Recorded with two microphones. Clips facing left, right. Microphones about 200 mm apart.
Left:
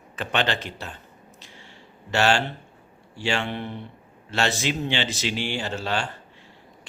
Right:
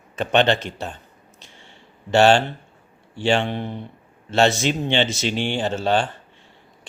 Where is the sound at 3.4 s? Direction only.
20° right (ahead or behind).